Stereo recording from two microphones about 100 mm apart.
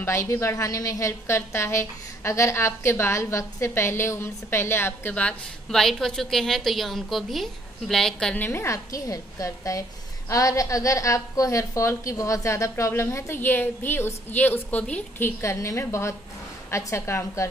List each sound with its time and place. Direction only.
0.0 s a woman's voice: 30° left (ahead or behind)
5.1 s a woman's voice: 10° left (ahead or behind)
8.4 s a woman's voice: 25° left (ahead or behind)